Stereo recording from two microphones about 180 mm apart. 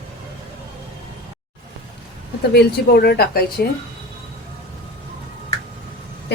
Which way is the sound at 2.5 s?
65° left (ahead or behind).